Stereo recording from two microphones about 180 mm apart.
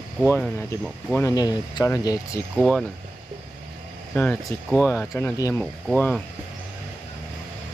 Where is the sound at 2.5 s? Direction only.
Centre (ahead or behind).